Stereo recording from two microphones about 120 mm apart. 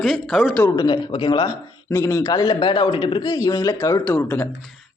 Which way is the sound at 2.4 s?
40° left (ahead or behind).